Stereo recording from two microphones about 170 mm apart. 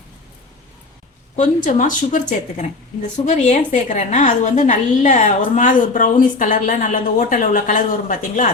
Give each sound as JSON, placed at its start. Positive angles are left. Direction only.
{"t": 1.4, "sound": "speech", "side_deg": 45}